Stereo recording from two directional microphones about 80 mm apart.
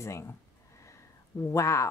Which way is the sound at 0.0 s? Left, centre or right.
Left.